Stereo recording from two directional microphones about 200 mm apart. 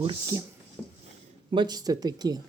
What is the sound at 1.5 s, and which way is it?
Speech, 20° right (ahead or behind).